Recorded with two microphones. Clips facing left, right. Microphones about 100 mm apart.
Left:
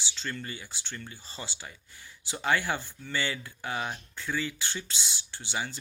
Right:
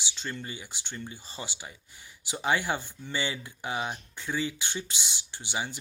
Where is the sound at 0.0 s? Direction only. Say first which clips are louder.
Even; 20° right (ahead or behind).